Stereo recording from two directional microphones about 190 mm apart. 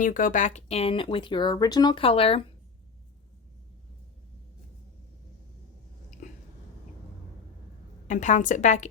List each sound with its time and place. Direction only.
0.0 s speech: 45° left (ahead or behind); by 2.5 s 30° left (ahead or behind)
8.0 s a woman's voice: 40° left (ahead or behind)